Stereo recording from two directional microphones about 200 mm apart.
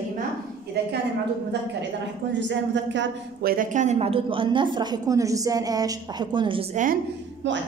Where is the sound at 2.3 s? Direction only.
65° right (ahead or behind).